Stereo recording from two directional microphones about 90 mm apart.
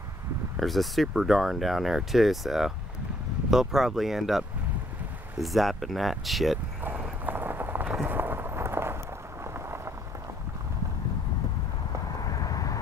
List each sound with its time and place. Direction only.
0.6 s speech: centre (ahead or behind)
6.8 s a sound: 20° right (ahead or behind)
12.2 s vehicle: 45° left (ahead or behind)